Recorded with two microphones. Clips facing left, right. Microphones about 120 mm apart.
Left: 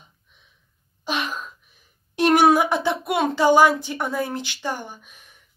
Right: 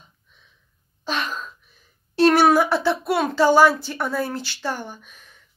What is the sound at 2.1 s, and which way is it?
A woman's voice, 15° left (ahead or behind).